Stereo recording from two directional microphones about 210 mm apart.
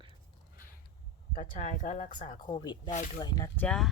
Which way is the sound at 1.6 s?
40° left (ahead or behind).